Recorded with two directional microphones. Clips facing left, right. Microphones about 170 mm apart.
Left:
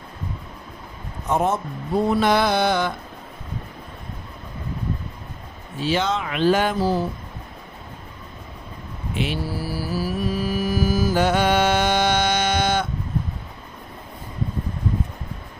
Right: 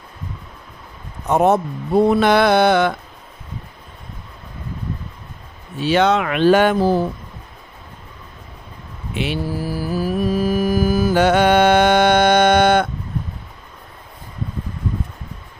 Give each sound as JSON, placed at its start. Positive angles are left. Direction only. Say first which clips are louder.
{"t": 1.3, "sound": "speech", "louder": "right 6 dB", "side_deg": -65}
{"t": 5.8, "sound": "speech", "louder": "right 7 dB", "side_deg": -65}
{"t": 9.1, "sound": "mantra", "louder": "right 3 dB", "side_deg": -75}
{"t": 9.5, "sound": "music", "louder": "right 4 dB", "side_deg": -45}